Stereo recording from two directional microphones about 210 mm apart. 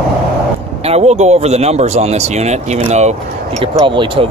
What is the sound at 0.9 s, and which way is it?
Speech, 30° right (ahead or behind).